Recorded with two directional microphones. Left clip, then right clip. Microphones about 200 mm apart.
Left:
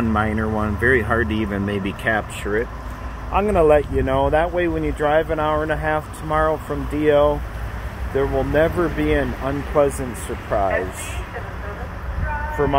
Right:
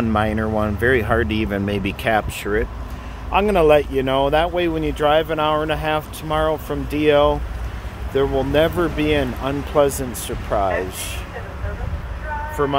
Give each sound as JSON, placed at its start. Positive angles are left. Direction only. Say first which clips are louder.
{"t": 0.1, "sound": "speech", "louder": "right 1 dB", "side_deg": -10}